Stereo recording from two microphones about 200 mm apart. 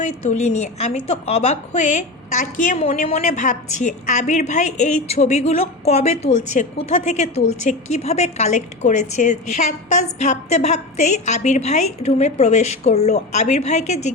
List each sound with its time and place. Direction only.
0.0 s a woman's voice: 35° left (ahead or behind)